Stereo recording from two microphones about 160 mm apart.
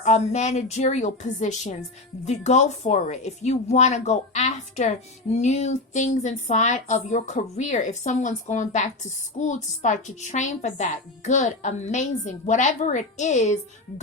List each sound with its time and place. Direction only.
0.0 s speech: 45° left (ahead or behind)